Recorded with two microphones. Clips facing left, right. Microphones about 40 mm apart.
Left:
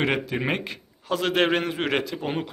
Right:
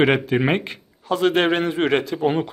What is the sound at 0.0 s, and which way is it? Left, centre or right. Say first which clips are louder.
Speech: right 7 dB; right.